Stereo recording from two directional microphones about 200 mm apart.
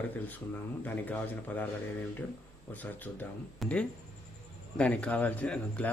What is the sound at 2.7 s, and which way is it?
Speech, 10° left (ahead or behind).